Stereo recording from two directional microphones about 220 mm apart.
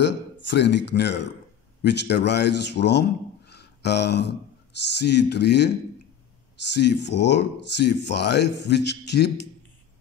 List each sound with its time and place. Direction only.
0.0 s a man's voice: 50° left (ahead or behind)
6.7 s speech: 50° left (ahead or behind)